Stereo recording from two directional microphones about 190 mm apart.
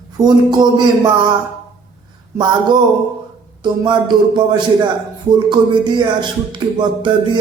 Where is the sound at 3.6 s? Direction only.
25° right (ahead or behind).